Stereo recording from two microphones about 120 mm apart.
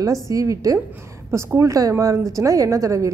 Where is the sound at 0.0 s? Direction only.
25° right (ahead or behind).